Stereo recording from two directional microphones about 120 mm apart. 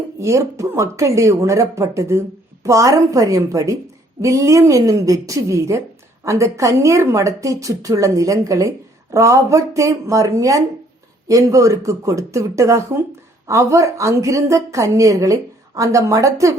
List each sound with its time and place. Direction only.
0.2 s a woman's voice: 25° right (ahead or behind)